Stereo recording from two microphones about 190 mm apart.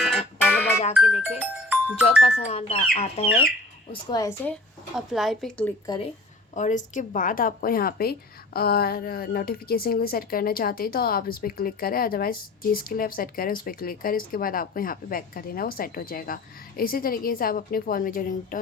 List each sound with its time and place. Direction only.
0.0 s music: centre (ahead or behind)
0.9 s speech: 5° right (ahead or behind)
2.5 s speech: 30° left (ahead or behind)
4.1 s a woman's voice: 15° left (ahead or behind)
4.9 s a woman's voice: centre (ahead or behind)
5.8 s speech: 20° left (ahead or behind)
6.6 s a woman's voice: 40° left (ahead or behind)